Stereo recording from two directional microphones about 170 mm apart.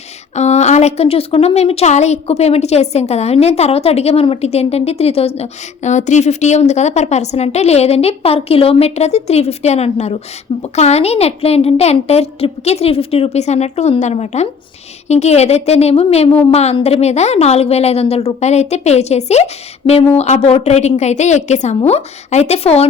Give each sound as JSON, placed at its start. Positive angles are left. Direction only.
{"t": 0.3, "sound": "a woman's voice", "side_deg": 40}